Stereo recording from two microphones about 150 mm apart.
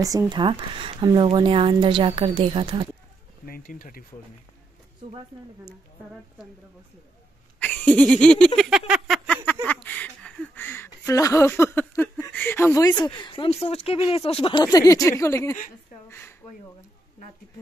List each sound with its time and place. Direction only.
0.0 s speech: 25° right (ahead or behind)
3.4 s speech: 75° left (ahead or behind)
7.5 s a sound: 10° left (ahead or behind)
12.3 s speech: 15° left (ahead or behind)